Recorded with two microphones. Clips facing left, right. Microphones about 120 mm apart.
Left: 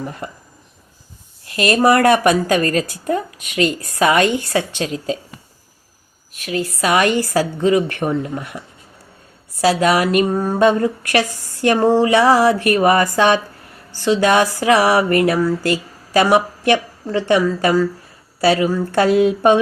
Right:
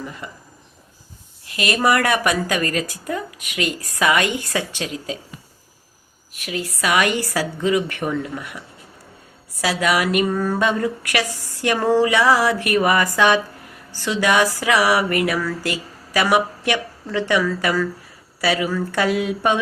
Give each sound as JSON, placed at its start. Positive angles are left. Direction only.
{"t": 0.0, "sound": "speech", "side_deg": 45}
{"t": 1.5, "sound": "speech", "side_deg": 35}
{"t": 6.4, "sound": "a woman's voice", "side_deg": 35}